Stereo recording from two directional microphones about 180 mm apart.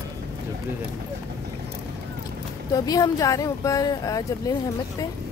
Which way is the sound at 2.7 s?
20° left (ahead or behind).